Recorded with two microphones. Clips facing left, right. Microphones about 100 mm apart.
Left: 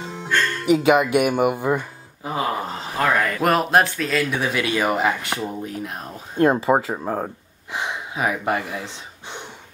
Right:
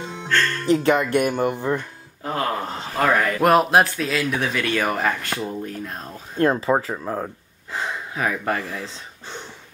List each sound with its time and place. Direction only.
0.1 s music: 10° left (ahead or behind)
3.0 s speech: centre (ahead or behind)
4.7 s speech: 15° left (ahead or behind)
7.7 s gasp: 15° left (ahead or behind)